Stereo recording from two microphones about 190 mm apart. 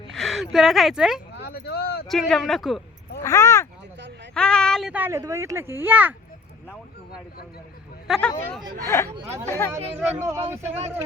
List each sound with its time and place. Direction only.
0.1 s a woman's voice: centre (ahead or behind)
1.3 s a sound: 60° left (ahead or behind)
2.0 s speech: centre (ahead or behind)
3.2 s a sound: 15° left (ahead or behind)
4.4 s speech: 5° left (ahead or behind)
8.0 s speech: centre (ahead or behind)
8.8 s speech: 15° left (ahead or behind)
9.0 s speech: 35° right (ahead or behind)
10.2 s speech: 15° right (ahead or behind)